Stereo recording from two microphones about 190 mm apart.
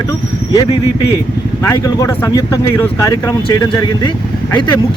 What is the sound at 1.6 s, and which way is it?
Speech, 15° left (ahead or behind).